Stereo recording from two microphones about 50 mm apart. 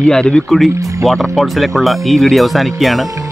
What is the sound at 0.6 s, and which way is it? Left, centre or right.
Speech, centre.